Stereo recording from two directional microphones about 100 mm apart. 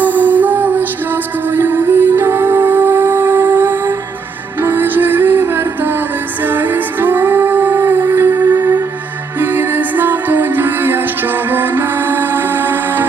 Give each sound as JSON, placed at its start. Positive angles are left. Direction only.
{"t": 0.0, "sound": "music", "side_deg": -15}